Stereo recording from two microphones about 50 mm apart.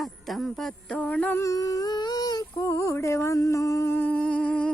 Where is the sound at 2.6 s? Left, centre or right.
Left.